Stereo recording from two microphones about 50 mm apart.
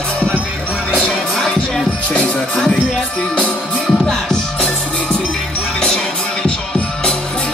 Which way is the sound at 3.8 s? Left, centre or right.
Centre.